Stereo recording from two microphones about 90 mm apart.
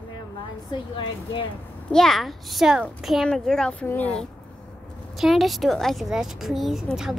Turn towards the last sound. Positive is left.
turn(degrees=-5)  # may be behind; listen again after turning